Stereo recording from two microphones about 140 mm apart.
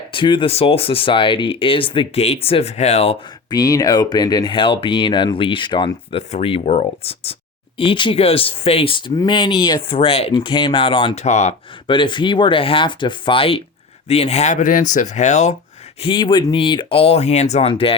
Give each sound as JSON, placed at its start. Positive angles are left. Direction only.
{"t": 0.1, "sound": "speech", "side_deg": 35}
{"t": 3.5, "sound": "speech", "side_deg": 25}
{"t": 6.1, "sound": "speech", "side_deg": 45}
{"t": 7.8, "sound": "speech", "side_deg": 35}
{"t": 11.2, "sound": "speech", "side_deg": 55}
{"t": 11.9, "sound": "speech", "side_deg": 35}
{"t": 16.0, "sound": "speech", "side_deg": 35}